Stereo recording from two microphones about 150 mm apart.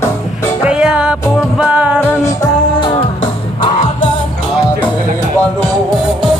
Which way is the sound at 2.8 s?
35° left (ahead or behind).